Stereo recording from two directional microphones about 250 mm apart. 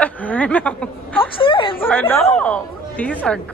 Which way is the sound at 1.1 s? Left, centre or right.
Left.